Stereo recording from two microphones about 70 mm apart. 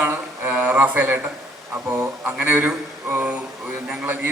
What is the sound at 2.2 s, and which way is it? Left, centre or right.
A man's voice, right.